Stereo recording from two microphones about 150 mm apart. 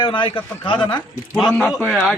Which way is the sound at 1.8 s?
15° left (ahead or behind).